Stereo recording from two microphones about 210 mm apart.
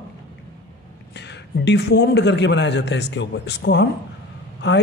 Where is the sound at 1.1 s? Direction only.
55° left (ahead or behind).